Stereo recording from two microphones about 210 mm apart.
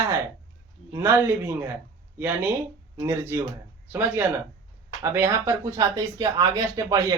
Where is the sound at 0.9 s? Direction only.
10° right (ahead or behind).